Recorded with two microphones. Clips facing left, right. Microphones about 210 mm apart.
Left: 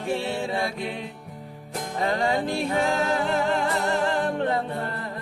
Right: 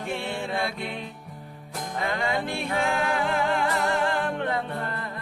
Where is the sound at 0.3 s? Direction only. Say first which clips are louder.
Left 3 dB; 10° left (ahead or behind).